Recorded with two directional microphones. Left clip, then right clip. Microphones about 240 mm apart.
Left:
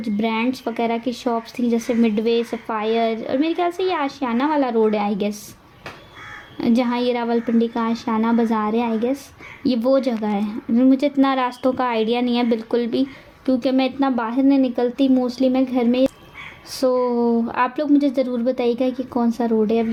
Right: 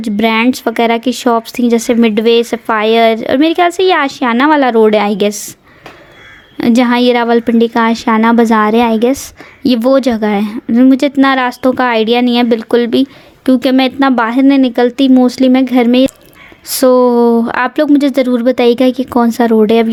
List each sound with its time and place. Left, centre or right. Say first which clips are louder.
0.0 s a woman's voice: right 11 dB; right
6.6 s a woman's voice: right 10 dB; right